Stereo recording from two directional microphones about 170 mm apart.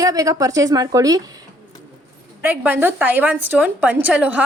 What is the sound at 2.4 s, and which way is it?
A woman's voice, 10° right (ahead or behind).